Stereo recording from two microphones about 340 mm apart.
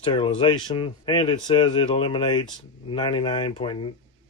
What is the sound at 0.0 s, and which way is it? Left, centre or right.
Speech, centre.